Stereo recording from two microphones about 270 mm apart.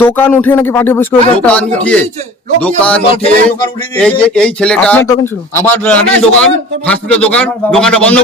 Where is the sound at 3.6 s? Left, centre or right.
Centre.